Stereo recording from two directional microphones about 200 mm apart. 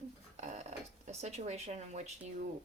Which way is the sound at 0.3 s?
35° right (ahead or behind).